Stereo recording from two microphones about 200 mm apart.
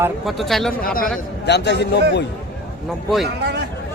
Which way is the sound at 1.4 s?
60° left (ahead or behind).